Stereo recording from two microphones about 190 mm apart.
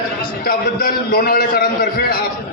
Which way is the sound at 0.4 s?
50° left (ahead or behind).